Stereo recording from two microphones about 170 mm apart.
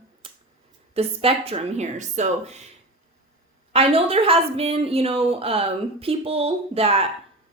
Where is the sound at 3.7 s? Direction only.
35° right (ahead or behind).